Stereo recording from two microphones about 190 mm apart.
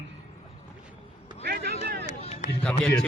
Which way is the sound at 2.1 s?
30° left (ahead or behind).